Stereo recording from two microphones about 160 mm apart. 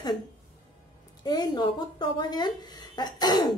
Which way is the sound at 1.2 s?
25° left (ahead or behind).